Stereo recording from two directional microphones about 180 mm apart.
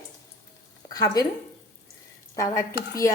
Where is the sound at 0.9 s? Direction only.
20° left (ahead or behind).